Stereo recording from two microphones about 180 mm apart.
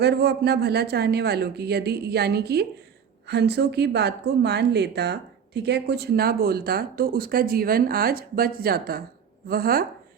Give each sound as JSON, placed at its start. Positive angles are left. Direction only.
{"t": 0.0, "sound": "speech", "side_deg": -70}